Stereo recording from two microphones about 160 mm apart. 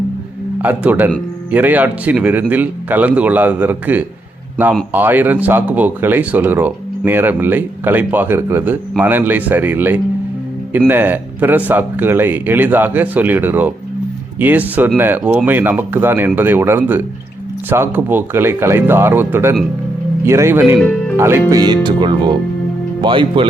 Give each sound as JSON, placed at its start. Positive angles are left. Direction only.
{"t": 0.6, "sound": "a man's voice", "side_deg": -10}
{"t": 21.5, "sound": "speech", "side_deg": -25}